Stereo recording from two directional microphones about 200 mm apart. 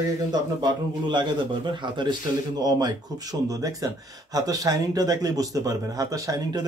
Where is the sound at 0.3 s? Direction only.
20° right (ahead or behind).